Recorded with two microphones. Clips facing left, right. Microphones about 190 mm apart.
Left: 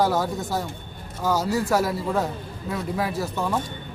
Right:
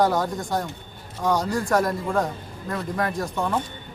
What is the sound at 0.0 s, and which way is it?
A man's voice, 5° left (ahead or behind).